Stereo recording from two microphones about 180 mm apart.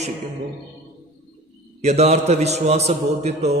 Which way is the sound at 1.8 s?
35° right (ahead or behind).